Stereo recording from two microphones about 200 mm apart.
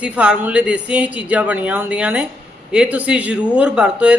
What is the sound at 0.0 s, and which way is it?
A man's voice, 5° right (ahead or behind).